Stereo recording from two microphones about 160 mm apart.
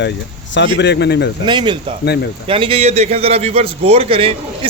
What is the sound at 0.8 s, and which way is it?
Speech, 90° left.